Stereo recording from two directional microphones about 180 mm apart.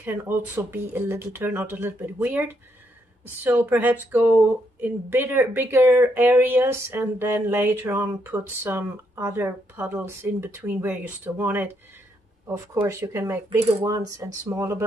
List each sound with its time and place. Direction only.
0.0 s speech: 15° right (ahead or behind)